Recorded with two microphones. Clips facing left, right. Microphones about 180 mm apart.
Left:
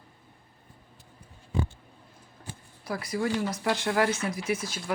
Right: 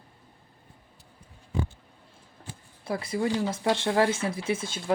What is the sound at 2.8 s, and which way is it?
Speech, 25° right (ahead or behind).